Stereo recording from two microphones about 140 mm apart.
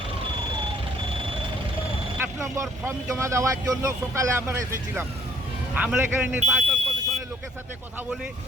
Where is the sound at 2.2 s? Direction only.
20° right (ahead or behind).